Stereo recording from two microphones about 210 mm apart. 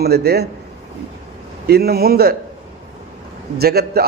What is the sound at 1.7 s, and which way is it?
Speech, 50° right (ahead or behind).